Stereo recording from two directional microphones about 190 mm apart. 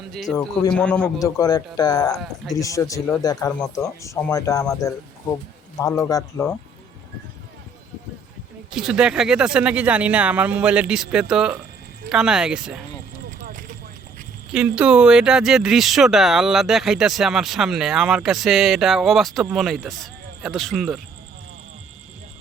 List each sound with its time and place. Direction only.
0.1 s a man's voice: centre (ahead or behind)
1.2 s speech: 20° left (ahead or behind)
2.1 s speech: centre (ahead or behind)
2.6 s speech: 15° left (ahead or behind)
8.7 s speech: centre (ahead or behind)
13.4 s vehicle: 45° right (ahead or behind)
14.8 s speech: 5° right (ahead or behind)